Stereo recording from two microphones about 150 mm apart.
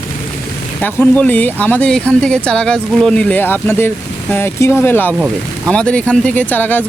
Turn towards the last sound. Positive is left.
turn(degrees=10)  # may be behind; listen again after turning